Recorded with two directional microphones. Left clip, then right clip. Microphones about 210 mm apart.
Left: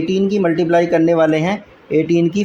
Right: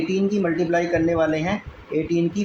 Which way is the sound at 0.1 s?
50° left (ahead or behind).